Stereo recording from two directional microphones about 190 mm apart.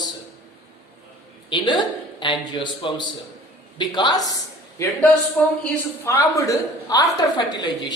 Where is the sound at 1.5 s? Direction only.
25° left (ahead or behind).